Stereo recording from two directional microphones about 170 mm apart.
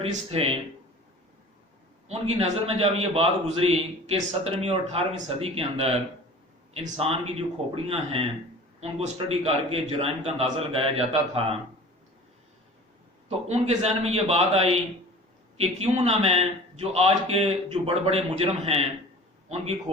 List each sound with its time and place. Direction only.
0.0 s a man's voice: 35° right (ahead or behind)
2.0 s a man's voice: 35° right (ahead or behind)
13.5 s a man's voice: 40° right (ahead or behind)